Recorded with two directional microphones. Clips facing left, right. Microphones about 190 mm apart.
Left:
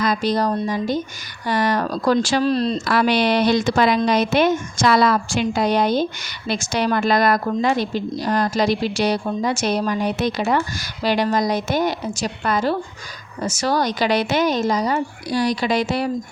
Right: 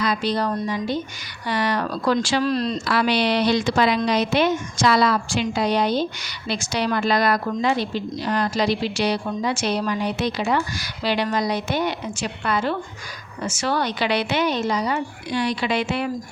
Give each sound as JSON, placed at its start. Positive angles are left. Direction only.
{"t": 0.0, "sound": "a woman's voice", "side_deg": 45}
{"t": 2.4, "sound": "a woman's voice", "side_deg": 30}
{"t": 2.8, "sound": "a woman's voice", "side_deg": 45}